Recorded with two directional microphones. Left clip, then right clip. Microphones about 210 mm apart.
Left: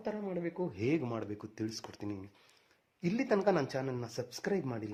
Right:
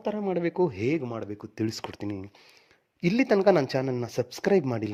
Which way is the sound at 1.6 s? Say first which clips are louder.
Right 10 dB; 35° right (ahead or behind).